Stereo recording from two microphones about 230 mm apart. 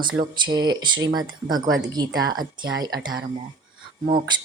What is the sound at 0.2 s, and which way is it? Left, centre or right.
Speech, centre.